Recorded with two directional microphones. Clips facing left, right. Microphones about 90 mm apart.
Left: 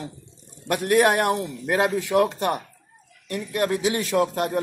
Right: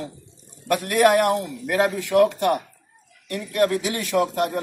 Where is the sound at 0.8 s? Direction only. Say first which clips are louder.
Right 1 dB; 25° left (ahead or behind).